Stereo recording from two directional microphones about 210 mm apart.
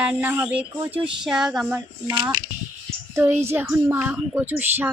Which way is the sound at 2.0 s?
20° right (ahead or behind).